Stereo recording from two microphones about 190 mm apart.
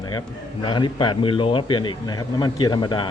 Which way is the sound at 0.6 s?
25° left (ahead or behind).